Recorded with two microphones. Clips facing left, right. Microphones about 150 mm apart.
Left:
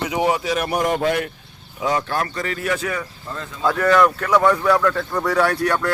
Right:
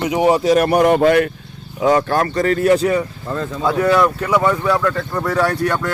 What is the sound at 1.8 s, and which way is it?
Speech, 55° right (ahead or behind).